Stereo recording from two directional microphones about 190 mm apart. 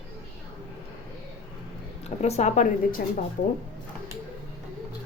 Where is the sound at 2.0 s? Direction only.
35° left (ahead or behind).